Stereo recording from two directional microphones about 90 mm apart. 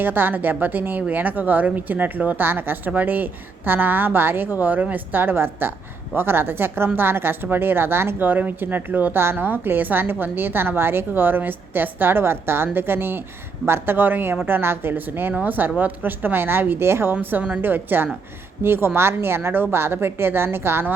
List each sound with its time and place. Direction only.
0.0 s speech: 20° right (ahead or behind)